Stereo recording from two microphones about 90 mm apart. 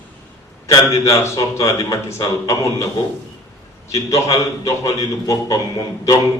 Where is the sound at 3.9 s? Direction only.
35° left (ahead or behind).